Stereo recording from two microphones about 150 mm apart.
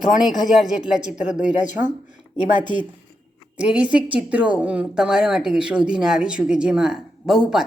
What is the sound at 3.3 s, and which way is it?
Speech, 5° right (ahead or behind).